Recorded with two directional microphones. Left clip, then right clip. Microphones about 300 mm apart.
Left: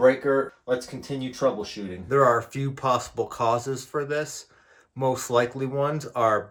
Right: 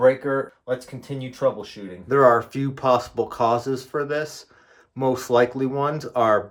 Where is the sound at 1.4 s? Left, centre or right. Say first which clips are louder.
Right 2 dB; centre.